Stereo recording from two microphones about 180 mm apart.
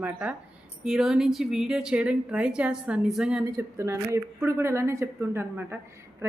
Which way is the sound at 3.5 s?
15° right (ahead or behind).